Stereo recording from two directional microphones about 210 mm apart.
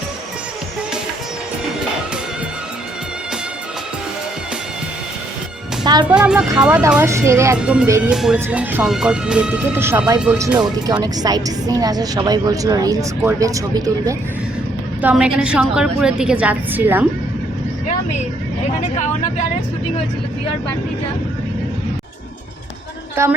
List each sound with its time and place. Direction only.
5.8 s music: 20° right (ahead or behind)
6.1 s a woman's voice: 5° right (ahead or behind)
15.0 s speech: 5° right (ahead or behind)
18.8 s speech: 35° left (ahead or behind)
23.2 s a woman's voice: 10° right (ahead or behind)